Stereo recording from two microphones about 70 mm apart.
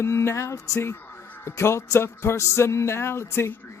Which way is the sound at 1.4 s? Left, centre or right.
Left.